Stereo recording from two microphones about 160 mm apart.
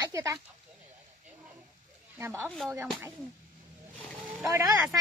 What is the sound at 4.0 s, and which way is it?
Wild animals, 5° right (ahead or behind).